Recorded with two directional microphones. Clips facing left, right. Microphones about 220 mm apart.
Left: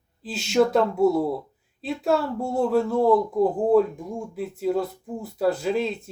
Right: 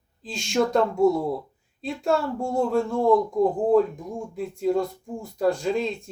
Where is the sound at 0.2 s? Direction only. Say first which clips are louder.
Left 3 dB; 5° left (ahead or behind).